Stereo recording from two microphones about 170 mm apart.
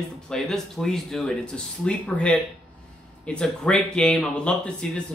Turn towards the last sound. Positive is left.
turn(degrees=5)  # may be behind; listen again after turning